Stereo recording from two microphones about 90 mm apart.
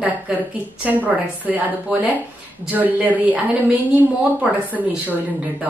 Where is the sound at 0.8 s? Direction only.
20° right (ahead or behind).